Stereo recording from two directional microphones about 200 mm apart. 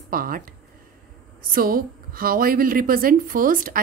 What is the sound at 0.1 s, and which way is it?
Speech, 45° right (ahead or behind).